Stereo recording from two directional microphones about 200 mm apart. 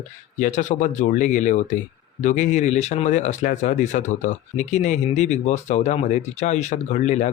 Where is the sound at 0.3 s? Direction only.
40° left (ahead or behind).